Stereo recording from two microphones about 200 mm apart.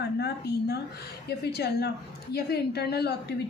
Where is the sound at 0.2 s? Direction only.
55° left (ahead or behind).